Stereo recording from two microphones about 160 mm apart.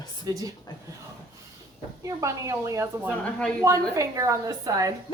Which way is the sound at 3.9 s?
20° right (ahead or behind).